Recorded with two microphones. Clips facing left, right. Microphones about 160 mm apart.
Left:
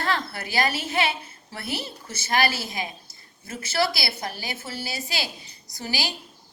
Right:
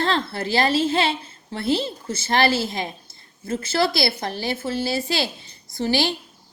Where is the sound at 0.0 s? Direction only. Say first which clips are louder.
Right 5 dB; 25° right (ahead or behind).